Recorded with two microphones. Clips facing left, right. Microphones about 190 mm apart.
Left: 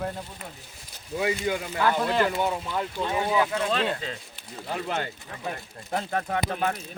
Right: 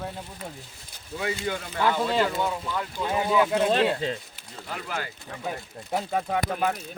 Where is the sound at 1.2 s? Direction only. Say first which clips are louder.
Left 3 dB; 15° left (ahead or behind).